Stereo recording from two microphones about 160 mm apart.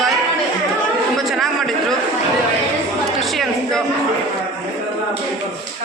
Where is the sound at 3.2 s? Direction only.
Centre (ahead or behind).